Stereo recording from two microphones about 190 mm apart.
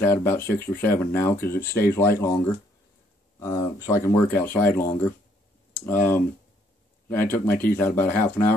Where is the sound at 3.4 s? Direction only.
15° left (ahead or behind).